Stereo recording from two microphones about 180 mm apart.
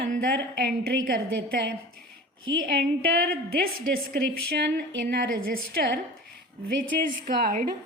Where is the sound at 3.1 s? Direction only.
55° right (ahead or behind).